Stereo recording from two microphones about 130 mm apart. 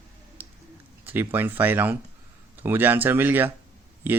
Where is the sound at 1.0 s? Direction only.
15° right (ahead or behind).